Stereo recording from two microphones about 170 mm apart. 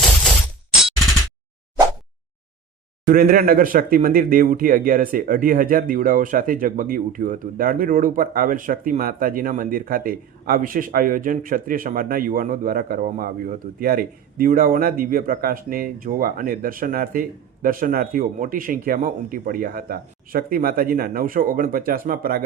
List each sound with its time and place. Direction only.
0.0 s shatter: 5° left (ahead or behind)
3.1 s speech: 55° right (ahead or behind)